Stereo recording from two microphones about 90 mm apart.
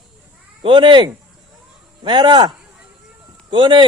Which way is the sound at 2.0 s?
55° right (ahead or behind).